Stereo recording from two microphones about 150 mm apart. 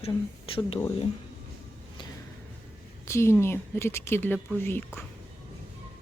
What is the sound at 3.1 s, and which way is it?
A woman's voice, 15° left (ahead or behind).